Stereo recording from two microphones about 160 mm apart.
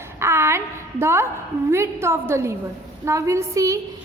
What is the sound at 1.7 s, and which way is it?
A woman's voice, 15° right (ahead or behind).